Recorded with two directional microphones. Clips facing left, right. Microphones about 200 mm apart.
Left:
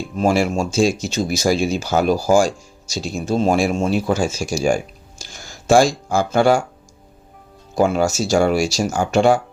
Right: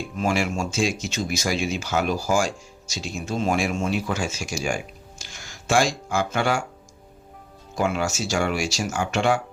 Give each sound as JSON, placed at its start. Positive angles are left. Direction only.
{"t": 0.2, "sound": "speech", "side_deg": 35}
{"t": 7.8, "sound": "speech", "side_deg": 35}